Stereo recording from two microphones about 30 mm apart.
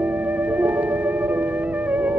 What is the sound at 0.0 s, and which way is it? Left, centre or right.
Music, right.